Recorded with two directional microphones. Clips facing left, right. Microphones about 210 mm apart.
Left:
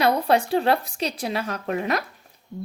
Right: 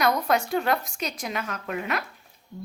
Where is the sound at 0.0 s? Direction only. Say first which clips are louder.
Left 3 dB; 30° left (ahead or behind).